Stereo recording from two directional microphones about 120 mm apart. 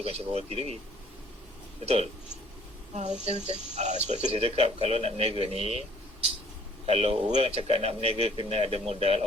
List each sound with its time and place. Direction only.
0.0 s speech: 55° right (ahead or behind)
1.8 s speech: 60° right (ahead or behind)
6.8 s speech: 55° right (ahead or behind)